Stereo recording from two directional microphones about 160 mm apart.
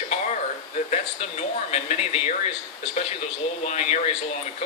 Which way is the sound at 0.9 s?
45° left (ahead or behind).